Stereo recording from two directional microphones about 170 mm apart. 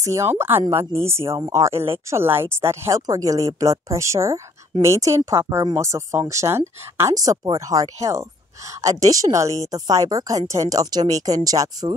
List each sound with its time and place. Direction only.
0.0 s a woman's voice: 15° right (ahead or behind)